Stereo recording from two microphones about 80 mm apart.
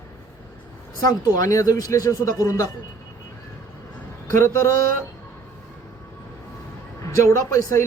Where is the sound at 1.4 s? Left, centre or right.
Left.